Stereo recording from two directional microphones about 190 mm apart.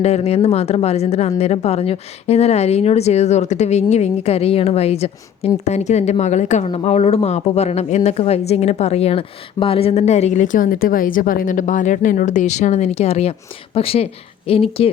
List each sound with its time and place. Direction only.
0.0 s a woman's voice: 35° left (ahead or behind)